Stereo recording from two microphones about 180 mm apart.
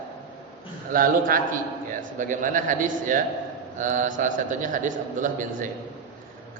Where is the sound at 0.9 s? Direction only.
50° right (ahead or behind).